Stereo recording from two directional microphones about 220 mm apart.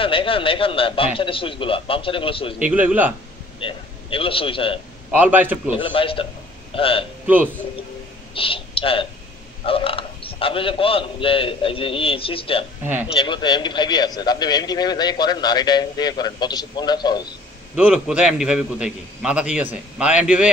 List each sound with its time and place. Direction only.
0.0 s a man's voice: 25° left (ahead or behind)
2.6 s a man's voice: 5° right (ahead or behind)
3.5 s a man's voice: 25° left (ahead or behind)
5.1 s a man's voice: 10° right (ahead or behind)
5.7 s a man's voice: 25° left (ahead or behind)
8.4 s a man's voice: 25° left (ahead or behind)
17.7 s a man's voice: 5° right (ahead or behind)